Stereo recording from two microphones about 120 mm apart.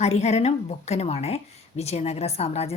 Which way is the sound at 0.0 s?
65° left (ahead or behind).